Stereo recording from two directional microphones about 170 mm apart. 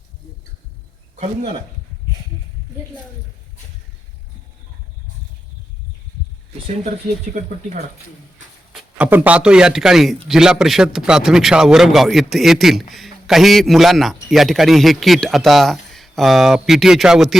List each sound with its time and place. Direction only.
1.2 s speech: 40° right (ahead or behind)
9.0 s a man's voice: 10° right (ahead or behind)